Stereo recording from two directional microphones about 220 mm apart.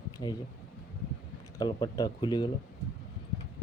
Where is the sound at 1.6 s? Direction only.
20° left (ahead or behind).